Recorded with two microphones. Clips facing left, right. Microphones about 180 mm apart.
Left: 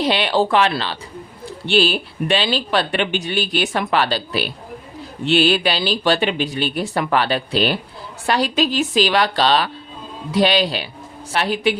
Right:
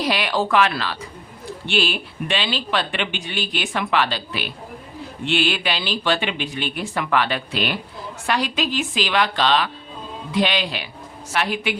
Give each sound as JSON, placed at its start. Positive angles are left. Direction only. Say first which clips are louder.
{"t": 0.0, "sound": "speech", "louder": "left 4 dB", "side_deg": 25}